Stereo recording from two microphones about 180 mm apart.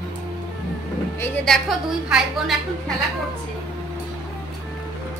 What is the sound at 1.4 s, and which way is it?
A woman's voice, centre (ahead or behind).